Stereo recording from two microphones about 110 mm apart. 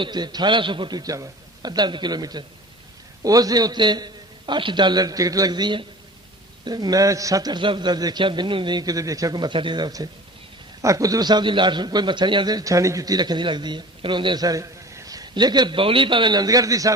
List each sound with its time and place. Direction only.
0.0 s a man's voice: 40° right (ahead or behind)
14.4 s a man's voice: 30° right (ahead or behind)